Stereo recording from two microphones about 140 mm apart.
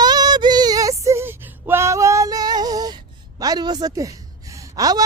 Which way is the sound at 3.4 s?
30° right (ahead or behind).